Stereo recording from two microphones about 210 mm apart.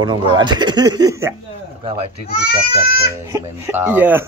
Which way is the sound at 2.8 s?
45° left (ahead or behind).